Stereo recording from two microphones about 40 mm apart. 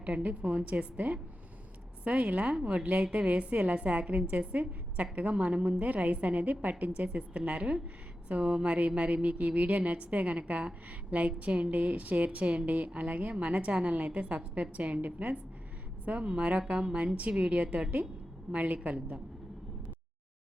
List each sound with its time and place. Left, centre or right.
0.0 s a woman's voice: right